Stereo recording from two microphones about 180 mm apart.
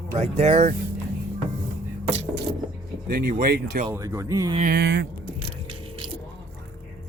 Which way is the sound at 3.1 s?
55° right (ahead or behind).